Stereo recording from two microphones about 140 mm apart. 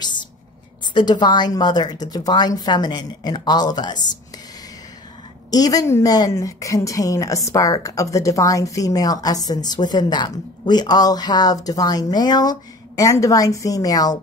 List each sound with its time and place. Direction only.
0.0 s a sound: 35° left (ahead or behind)
0.9 s a woman's voice: 30° left (ahead or behind)
5.5 s a woman's voice: 25° left (ahead or behind)